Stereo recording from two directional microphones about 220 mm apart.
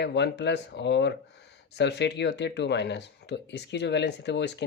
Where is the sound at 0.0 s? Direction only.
50° left (ahead or behind).